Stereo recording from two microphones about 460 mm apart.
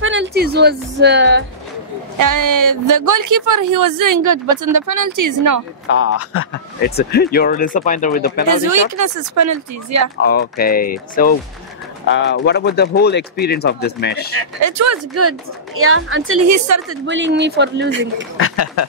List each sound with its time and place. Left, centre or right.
0.0 s a woman's voice: right
2.1 s speech: right
5.9 s speech: left
8.9 s speech: right
10.2 s speech: centre
14.3 s speech: right
17.0 s speech: right
18.4 s speech: left